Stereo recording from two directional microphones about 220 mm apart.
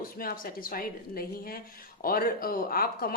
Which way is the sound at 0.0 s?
40° left (ahead or behind).